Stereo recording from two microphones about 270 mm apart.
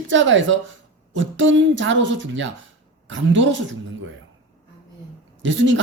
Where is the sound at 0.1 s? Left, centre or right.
Right.